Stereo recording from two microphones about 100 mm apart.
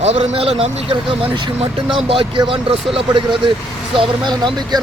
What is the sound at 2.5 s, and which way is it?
Speech, 60° right (ahead or behind).